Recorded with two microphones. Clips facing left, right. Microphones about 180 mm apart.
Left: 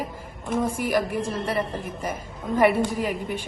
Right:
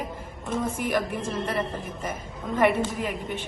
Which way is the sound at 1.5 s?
Centre (ahead or behind).